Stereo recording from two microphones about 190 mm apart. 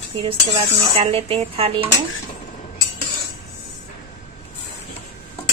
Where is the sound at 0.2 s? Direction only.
30° right (ahead or behind).